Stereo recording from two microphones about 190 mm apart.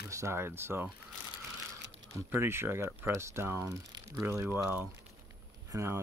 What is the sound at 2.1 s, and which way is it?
Speech, 15° right (ahead or behind).